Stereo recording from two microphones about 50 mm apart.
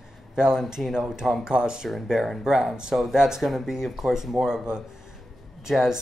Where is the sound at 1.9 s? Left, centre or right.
Centre.